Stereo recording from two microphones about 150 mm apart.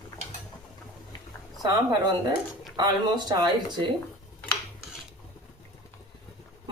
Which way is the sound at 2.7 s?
30° right (ahead or behind).